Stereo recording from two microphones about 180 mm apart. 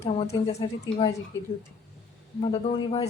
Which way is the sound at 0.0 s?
35° left (ahead or behind).